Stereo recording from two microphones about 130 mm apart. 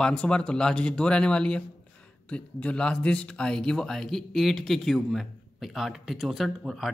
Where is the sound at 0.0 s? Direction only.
10° left (ahead or behind).